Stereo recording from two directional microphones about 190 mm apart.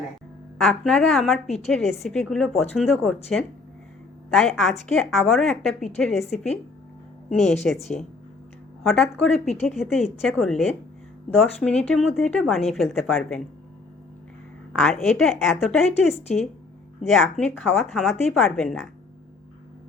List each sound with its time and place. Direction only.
0.6 s a woman's voice: 5° left (ahead or behind)
8.8 s a woman's voice: centre (ahead or behind)
11.6 s a woman's voice: 5° left (ahead or behind)
14.7 s a woman's voice: centre (ahead or behind)